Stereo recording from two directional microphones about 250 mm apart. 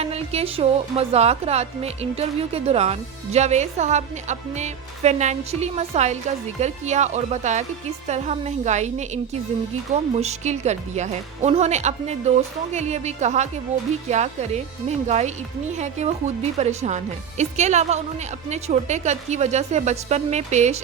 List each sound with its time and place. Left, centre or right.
0.0 s a woman's voice: right